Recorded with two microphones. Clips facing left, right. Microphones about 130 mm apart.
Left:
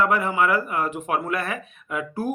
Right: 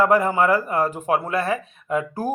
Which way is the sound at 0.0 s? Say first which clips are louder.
Right 4 dB; 40° right (ahead or behind).